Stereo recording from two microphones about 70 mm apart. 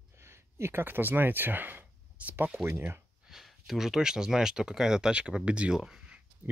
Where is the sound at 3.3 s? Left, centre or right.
Centre.